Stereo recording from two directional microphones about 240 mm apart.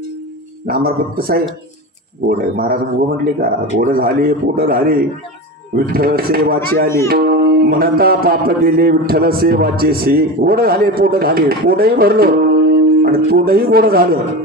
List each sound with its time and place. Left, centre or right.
0.7 s music: right